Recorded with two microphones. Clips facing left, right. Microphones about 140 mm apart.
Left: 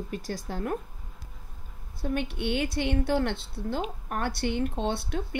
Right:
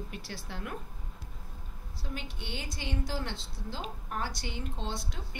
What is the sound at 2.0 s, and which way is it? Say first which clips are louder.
Speech: left 12 dB; 60° left (ahead or behind).